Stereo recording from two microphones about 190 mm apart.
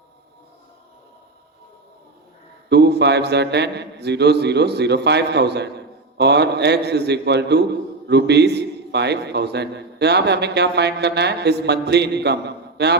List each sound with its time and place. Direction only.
2.6 s a man's voice: 60° right (ahead or behind)